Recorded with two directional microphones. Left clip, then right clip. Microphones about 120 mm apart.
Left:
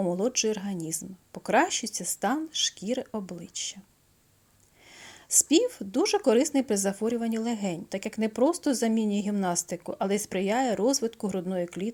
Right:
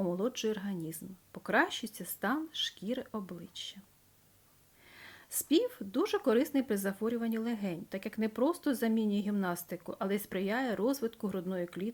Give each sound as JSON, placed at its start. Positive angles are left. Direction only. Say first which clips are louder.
{"t": 0.0, "sound": "speech", "louder": "left 7 dB", "side_deg": 20}
{"t": 4.9, "sound": "speech", "louder": "left 17 dB", "side_deg": 30}